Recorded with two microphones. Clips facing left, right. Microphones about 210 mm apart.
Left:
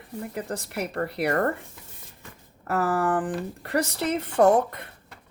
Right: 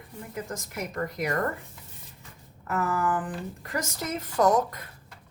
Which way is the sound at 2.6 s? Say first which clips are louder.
Left 3 dB; 35° left (ahead or behind).